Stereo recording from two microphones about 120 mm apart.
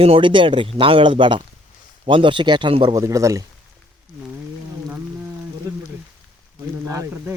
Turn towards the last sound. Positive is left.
turn(degrees=-25)  # may be behind; listen again after turning